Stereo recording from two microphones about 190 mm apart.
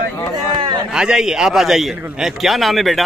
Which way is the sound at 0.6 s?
20° right (ahead or behind).